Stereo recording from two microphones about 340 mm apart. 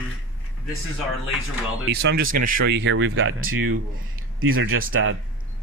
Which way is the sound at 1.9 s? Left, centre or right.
Right.